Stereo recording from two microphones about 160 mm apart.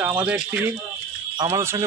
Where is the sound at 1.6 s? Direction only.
15° right (ahead or behind).